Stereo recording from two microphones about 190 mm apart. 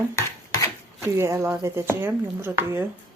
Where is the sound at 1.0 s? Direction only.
15° right (ahead or behind).